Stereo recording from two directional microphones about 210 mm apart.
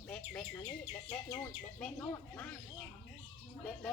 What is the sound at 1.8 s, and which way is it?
Speech, 10° left (ahead or behind).